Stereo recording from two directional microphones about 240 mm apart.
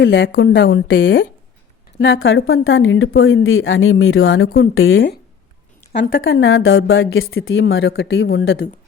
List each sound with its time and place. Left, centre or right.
0.0 s a woman's voice: left